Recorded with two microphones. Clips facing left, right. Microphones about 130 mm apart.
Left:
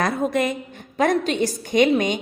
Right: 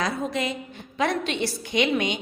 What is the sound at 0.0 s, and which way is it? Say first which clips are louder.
A woman's voice: left 5 dB; 50° left (ahead or behind).